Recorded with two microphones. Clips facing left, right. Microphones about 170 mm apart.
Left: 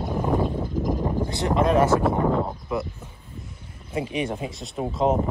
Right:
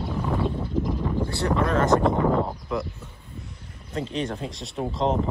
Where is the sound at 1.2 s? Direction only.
20° left (ahead or behind).